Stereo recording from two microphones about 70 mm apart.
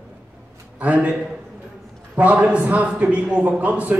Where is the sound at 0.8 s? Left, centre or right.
Right.